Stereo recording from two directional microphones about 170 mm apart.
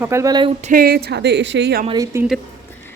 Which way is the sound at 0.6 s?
55° right (ahead or behind).